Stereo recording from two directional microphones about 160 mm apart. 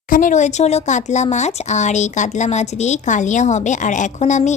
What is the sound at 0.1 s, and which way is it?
A woman's voice, 55° left (ahead or behind).